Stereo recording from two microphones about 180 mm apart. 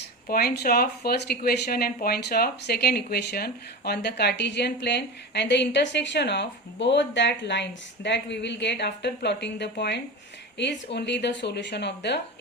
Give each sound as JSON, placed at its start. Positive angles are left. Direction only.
{"t": 0.3, "sound": "speech", "side_deg": 60}